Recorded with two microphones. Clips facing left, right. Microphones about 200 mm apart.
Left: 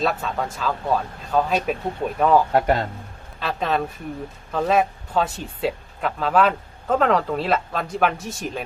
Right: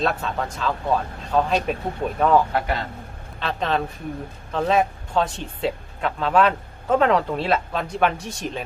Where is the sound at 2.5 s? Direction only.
45° left (ahead or behind).